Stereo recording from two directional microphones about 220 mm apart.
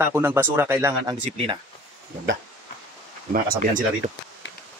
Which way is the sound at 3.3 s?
40° right (ahead or behind).